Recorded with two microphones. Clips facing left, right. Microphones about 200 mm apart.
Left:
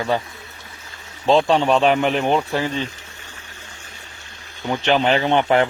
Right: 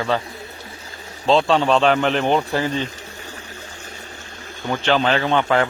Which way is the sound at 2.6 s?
35° right (ahead or behind).